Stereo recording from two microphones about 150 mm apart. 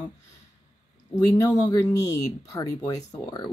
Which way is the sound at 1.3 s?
25° left (ahead or behind).